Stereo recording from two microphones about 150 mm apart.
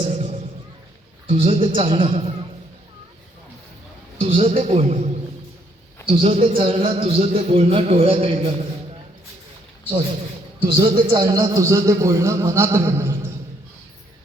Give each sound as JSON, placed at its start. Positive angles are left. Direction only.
{"t": 1.3, "sound": "a man's voice", "side_deg": -40}
{"t": 4.2, "sound": "a man's voice", "side_deg": -40}
{"t": 10.8, "sound": "a man's voice", "side_deg": -30}